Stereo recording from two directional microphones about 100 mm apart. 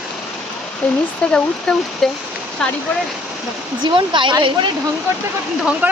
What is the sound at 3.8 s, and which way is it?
Speech, 50° right (ahead or behind).